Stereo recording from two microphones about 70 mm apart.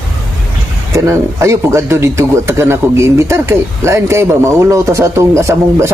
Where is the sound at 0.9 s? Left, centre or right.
Right.